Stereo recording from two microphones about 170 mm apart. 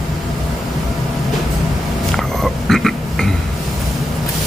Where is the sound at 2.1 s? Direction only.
Centre (ahead or behind).